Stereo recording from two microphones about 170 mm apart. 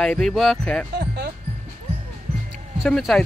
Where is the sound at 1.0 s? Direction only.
75° right (ahead or behind).